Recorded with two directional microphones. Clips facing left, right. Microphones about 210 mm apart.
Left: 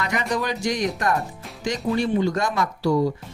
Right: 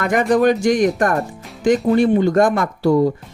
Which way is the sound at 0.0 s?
50° right (ahead or behind).